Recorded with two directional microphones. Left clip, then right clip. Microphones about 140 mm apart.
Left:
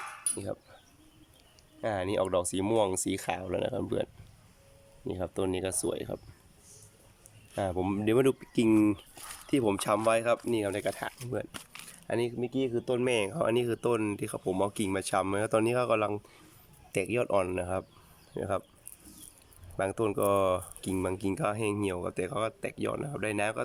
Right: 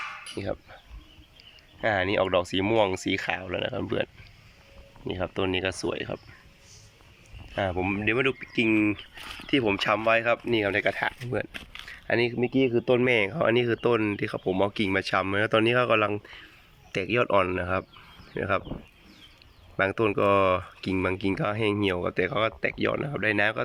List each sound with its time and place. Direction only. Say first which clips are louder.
0.4 s speech: right 6 dB; 10° left (ahead or behind)
1.8 s speech: right 6 dB; 15° left (ahead or behind)
7.5 s speech: right 4 dB; 20° left (ahead or behind)
11.5 s a sound: right 6 dB; 15° left (ahead or behind)
12.4 s speech: right 7 dB; centre (ahead or behind)
13.1 s speech: right 5 dB; 15° left (ahead or behind)
19.7 s speech: right 6 dB; 10° left (ahead or behind)